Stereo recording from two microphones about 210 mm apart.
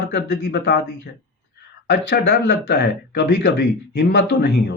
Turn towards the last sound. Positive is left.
turn(degrees=55)  # may be behind; listen again after turning